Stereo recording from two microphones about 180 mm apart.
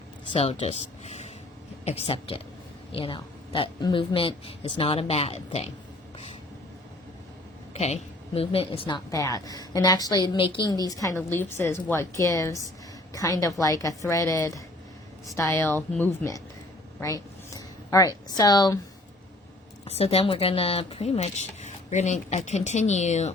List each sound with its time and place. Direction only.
0.3 s a woman's voice: 35° left (ahead or behind)
7.7 s a woman's voice: 35° left (ahead or behind)
9.0 s a woman's voice: 20° left (ahead or behind)
19.8 s speech: 35° left (ahead or behind)